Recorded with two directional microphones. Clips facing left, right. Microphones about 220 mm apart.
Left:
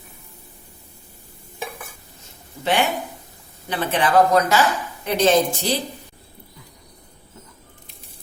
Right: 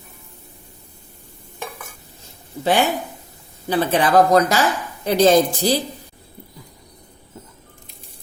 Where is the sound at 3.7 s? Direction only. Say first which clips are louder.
Right 3 dB; 35° right (ahead or behind).